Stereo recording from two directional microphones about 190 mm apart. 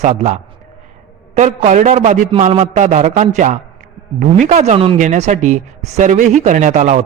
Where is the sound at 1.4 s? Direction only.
40° right (ahead or behind).